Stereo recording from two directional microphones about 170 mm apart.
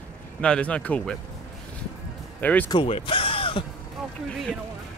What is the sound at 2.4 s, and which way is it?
Speech, 10° left (ahead or behind).